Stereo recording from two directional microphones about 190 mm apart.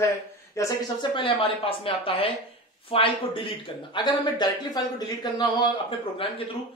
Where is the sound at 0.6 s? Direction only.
20° left (ahead or behind).